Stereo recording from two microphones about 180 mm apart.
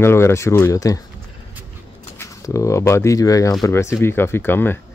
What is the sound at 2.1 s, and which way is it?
Speech, 15° left (ahead or behind).